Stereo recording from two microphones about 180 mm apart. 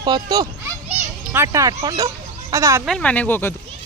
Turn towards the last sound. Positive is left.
turn(degrees=10)  # may be behind; listen again after turning